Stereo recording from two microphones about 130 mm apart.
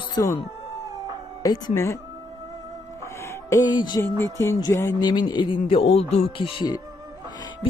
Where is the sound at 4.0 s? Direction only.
20° left (ahead or behind).